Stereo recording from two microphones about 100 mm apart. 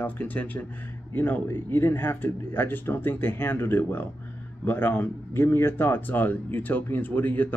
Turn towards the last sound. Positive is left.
turn(degrees=20)  # may be behind; listen again after turning